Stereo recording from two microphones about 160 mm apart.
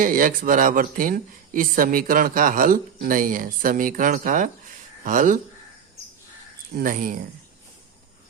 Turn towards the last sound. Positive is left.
turn(degrees=-55)  # may be behind; listen again after turning